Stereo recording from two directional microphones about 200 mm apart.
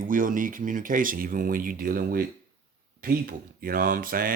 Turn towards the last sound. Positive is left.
turn(degrees=-45)  # may be behind; listen again after turning